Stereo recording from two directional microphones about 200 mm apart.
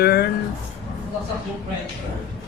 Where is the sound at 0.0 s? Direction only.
50° left (ahead or behind).